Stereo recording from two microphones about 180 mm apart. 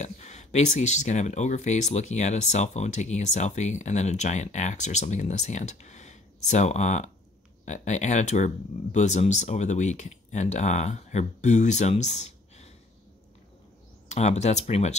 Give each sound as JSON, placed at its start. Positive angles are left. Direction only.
{"t": 0.0, "sound": "speech", "side_deg": 40}
{"t": 14.0, "sound": "speech", "side_deg": 40}